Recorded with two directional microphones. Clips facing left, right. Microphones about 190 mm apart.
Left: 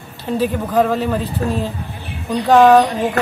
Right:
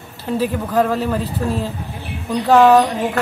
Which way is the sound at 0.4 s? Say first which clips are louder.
Left 2 dB; 5° right (ahead or behind).